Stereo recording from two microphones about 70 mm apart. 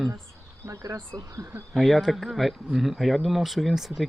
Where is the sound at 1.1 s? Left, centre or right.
Right.